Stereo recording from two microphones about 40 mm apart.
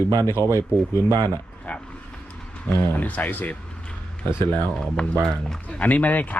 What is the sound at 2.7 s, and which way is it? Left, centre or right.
Speech, left.